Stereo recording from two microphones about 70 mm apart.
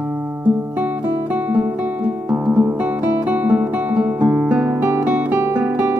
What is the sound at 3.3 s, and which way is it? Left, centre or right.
Guitar, right.